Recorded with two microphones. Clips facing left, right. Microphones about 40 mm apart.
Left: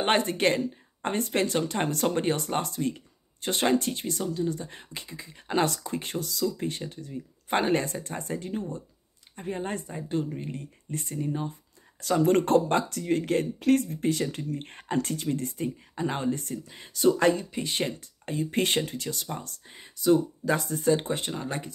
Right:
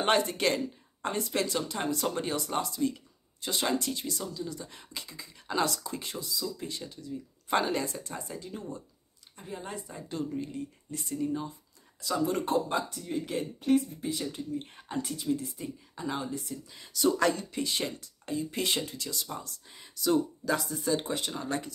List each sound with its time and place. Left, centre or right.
0.0 s speech: left
9.8 s speech: left
11.1 s speech: left
12.0 s speech: left
16.6 s speech: left
17.7 s speech: left
20.6 s speech: left
20.9 s speech: left
21.3 s speech: left